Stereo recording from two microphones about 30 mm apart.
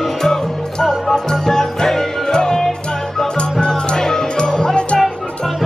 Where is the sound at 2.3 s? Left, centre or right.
Left.